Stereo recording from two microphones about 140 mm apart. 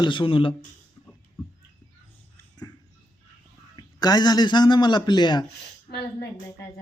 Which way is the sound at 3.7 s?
30° left (ahead or behind).